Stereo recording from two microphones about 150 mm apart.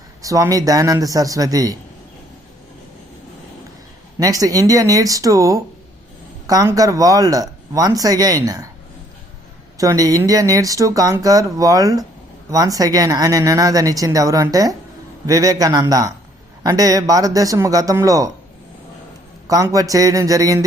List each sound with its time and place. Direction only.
0.2 s speech: 20° right (ahead or behind)
4.2 s speech: 25° right (ahead or behind)
9.7 s speech: 25° right (ahead or behind)
19.5 s speech: 25° right (ahead or behind)